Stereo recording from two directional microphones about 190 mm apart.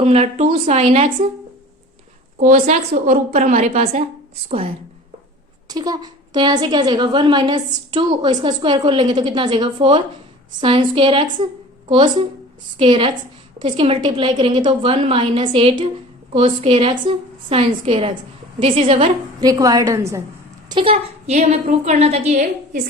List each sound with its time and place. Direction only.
0.0 s a woman's voice: 35° right (ahead or behind)
2.4 s a woman's voice: 40° right (ahead or behind)
12.7 s a woman's voice: 25° right (ahead or behind)
20.7 s a woman's voice: 25° right (ahead or behind)